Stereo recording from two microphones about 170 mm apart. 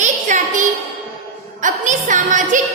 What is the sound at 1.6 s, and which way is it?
Speech, 50° right (ahead or behind).